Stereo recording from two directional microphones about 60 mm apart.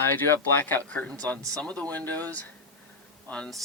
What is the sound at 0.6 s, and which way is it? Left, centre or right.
Speech, left.